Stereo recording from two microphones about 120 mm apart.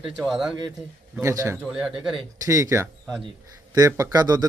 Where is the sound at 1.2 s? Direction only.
25° right (ahead or behind).